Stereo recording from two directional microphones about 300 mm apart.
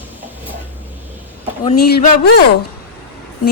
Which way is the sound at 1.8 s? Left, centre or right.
Left.